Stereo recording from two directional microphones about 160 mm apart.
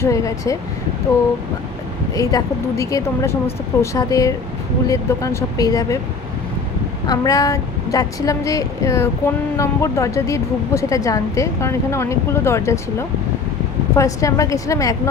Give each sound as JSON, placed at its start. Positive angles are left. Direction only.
{"t": 0.0, "sound": "speech", "side_deg": 20}
{"t": 2.1, "sound": "speech", "side_deg": 20}
{"t": 7.1, "sound": "speech", "side_deg": 20}